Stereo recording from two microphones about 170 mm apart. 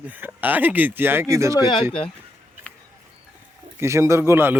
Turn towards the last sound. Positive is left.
turn(degrees=-15)  # may be behind; listen again after turning